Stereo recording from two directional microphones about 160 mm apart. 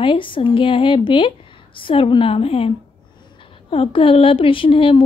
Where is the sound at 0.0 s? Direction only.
30° left (ahead or behind).